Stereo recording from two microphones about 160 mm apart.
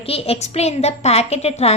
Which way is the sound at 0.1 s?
40° left (ahead or behind).